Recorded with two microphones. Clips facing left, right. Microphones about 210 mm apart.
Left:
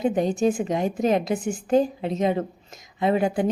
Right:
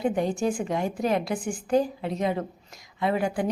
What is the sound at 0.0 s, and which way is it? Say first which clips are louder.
A woman's voice: left 4 dB; 20° left (ahead or behind).